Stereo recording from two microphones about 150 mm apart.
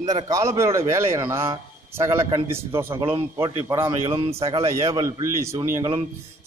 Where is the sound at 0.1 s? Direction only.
20° right (ahead or behind).